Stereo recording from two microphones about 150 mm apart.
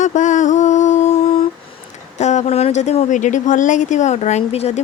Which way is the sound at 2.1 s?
50° left (ahead or behind).